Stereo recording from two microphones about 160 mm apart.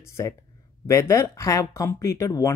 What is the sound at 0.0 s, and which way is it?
Speech, 20° left (ahead or behind).